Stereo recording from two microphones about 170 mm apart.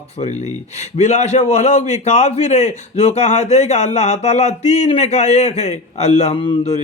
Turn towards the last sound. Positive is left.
turn(degrees=35)  # may be behind; listen again after turning